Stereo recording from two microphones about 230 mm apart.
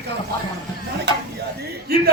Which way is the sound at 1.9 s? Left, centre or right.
Right.